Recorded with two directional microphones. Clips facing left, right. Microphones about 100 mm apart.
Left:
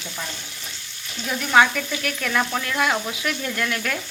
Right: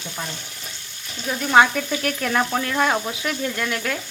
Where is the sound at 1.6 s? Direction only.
30° right (ahead or behind).